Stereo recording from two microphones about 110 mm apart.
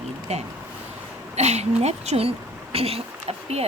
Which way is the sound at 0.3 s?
80° right.